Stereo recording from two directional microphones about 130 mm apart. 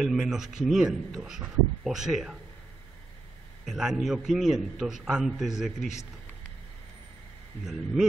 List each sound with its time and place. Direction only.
0.0 s a man's voice: 5° right (ahead or behind)
3.6 s a man's voice: 5° right (ahead or behind)
7.6 s a man's voice: 5° right (ahead or behind)